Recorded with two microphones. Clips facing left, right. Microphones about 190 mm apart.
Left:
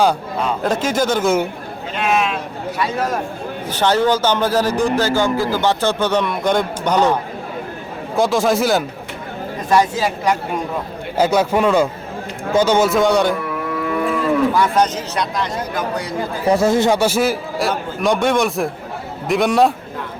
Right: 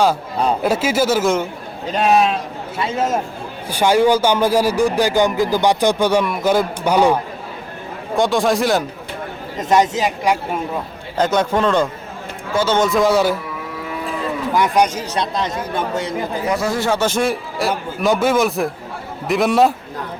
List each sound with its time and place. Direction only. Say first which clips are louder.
0.6 s speech: left 1 dB; 10° right (ahead or behind)
1.9 s a sound: right 4 dB; 35° right (ahead or behind)
3.7 s speech: right 2 dB; 10° right (ahead or behind)
8.1 s a man's voice: even; centre (ahead or behind)
9.6 s speech: right 1 dB; 20° right (ahead or behind)
11.2 s a man's voice: left 1 dB; 10° left (ahead or behind)
13.7 s livestock: left 8 dB; 60° left (ahead or behind)
14.5 s speech: even; 15° right (ahead or behind)
16.5 s a man's voice: left 6 dB; 25° left (ahead or behind); by 19.7 s centre (ahead or behind)